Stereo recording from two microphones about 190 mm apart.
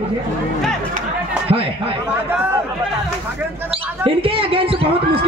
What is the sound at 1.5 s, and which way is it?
Speech, 30° right (ahead or behind).